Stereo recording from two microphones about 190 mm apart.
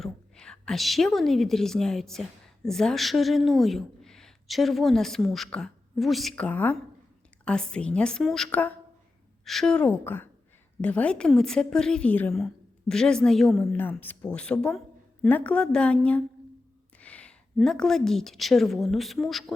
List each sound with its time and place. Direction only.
0.0 s a woman's voice: 5° left (ahead or behind)